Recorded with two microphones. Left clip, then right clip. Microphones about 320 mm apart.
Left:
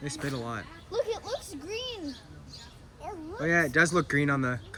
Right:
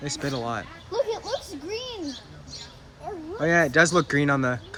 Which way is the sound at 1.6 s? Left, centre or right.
Left.